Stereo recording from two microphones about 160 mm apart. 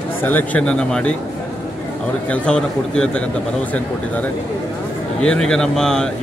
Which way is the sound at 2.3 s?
5° left (ahead or behind).